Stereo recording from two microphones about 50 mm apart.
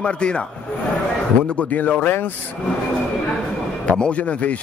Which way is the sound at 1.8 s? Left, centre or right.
Left.